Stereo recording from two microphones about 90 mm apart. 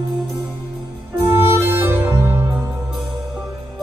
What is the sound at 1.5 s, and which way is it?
Music, 25° right (ahead or behind).